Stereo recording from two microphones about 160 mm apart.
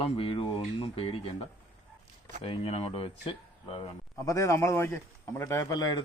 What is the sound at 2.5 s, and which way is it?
Speech, 35° left (ahead or behind).